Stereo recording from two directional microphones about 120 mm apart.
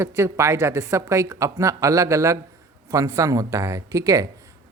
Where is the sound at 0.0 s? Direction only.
25° right (ahead or behind).